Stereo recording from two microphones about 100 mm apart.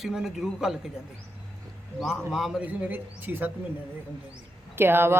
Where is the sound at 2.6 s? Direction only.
15° right (ahead or behind).